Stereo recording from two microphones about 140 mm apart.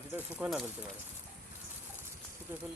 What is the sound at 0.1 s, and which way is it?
Speech, 15° right (ahead or behind).